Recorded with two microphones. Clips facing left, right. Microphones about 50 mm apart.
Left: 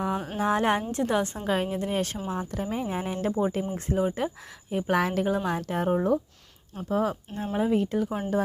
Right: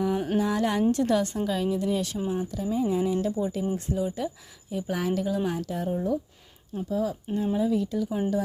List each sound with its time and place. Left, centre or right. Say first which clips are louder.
0.3 s a woman's voice: left 3 dB; left
1.5 s a woman's voice: right 1 dB; left